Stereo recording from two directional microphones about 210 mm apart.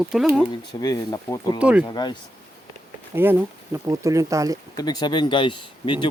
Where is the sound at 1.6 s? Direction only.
5° right (ahead or behind).